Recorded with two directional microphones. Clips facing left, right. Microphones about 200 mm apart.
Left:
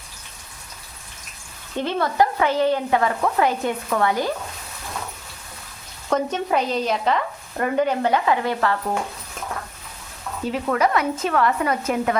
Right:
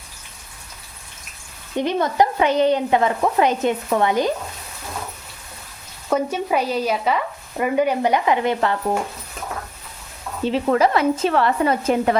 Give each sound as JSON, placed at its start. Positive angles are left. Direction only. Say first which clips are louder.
{"t": 1.7, "sound": "speech", "louder": "right 3 dB", "side_deg": -15}
{"t": 6.1, "sound": "speech", "louder": "right 1 dB", "side_deg": -10}
{"t": 10.4, "sound": "speech", "louder": "right 4 dB", "side_deg": -30}